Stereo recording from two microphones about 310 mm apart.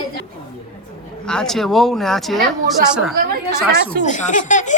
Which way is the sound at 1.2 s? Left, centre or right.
Centre.